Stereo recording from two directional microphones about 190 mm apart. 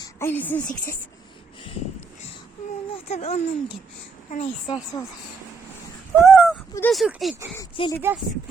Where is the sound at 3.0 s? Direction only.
35° left (ahead or behind).